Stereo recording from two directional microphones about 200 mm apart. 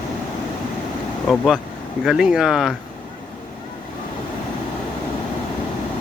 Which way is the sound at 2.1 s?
Centre (ahead or behind).